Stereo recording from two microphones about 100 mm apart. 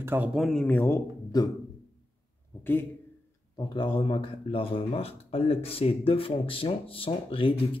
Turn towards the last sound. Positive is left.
turn(degrees=65)  # may be behind; listen again after turning